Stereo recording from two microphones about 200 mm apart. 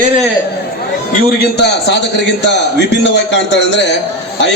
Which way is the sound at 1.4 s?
60° left (ahead or behind).